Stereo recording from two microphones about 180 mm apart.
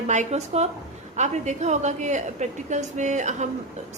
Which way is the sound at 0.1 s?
40° right (ahead or behind).